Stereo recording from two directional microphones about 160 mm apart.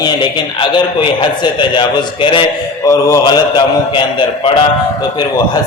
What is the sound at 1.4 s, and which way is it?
A man's voice, 30° left (ahead or behind).